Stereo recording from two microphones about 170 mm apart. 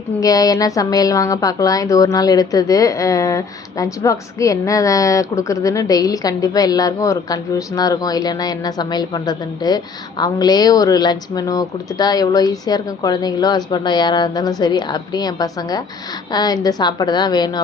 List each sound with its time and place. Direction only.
0.2 s a woman's voice: 20° left (ahead or behind)